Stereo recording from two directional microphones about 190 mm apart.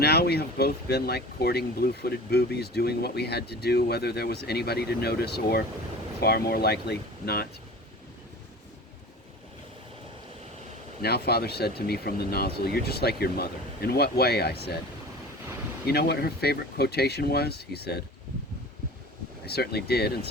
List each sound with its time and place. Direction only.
0.0 s speech: 60° left (ahead or behind)
11.0 s speech: 60° left (ahead or behind)
15.9 s speech: 55° left (ahead or behind)
19.5 s speech: 55° left (ahead or behind)